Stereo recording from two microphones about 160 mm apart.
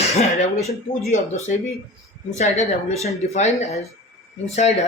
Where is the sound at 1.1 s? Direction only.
45° left (ahead or behind).